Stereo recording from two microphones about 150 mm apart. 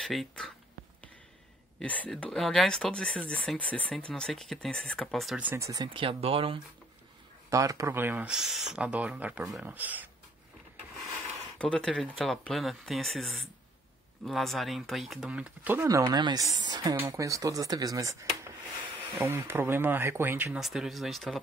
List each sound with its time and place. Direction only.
0.0 s speech: centre (ahead or behind)
1.8 s speech: 10° left (ahead or behind)
5.4 s speech: 15° right (ahead or behind)
5.7 s speech: 30° right (ahead or behind)
7.4 s speech: 20° right (ahead or behind)
11.5 s speech: 5° left (ahead or behind); by 20.5 s 15° right (ahead or behind)
20.5 s speech: centre (ahead or behind)